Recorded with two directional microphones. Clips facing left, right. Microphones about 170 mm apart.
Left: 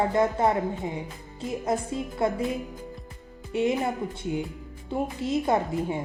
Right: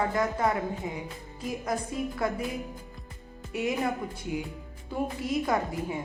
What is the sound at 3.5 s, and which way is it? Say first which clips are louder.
Speech: left 4 dB; 25° left (ahead or behind).